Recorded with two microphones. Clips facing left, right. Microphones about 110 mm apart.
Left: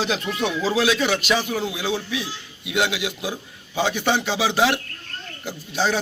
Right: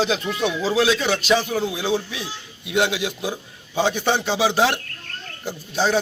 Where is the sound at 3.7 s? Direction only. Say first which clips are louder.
Right 1 dB; 5° left (ahead or behind).